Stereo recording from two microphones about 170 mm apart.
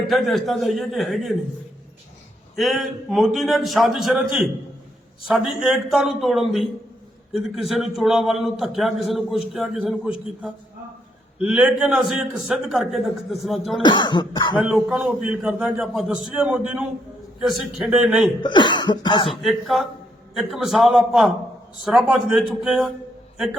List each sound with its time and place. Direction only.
0.1 s a man's voice: centre (ahead or behind)
2.6 s a man's voice: centre (ahead or behind)
13.8 s cough: 25° left (ahead or behind)
14.6 s a man's voice: 5° right (ahead or behind)
18.4 s cough: 25° left (ahead or behind)
19.4 s a man's voice: centre (ahead or behind)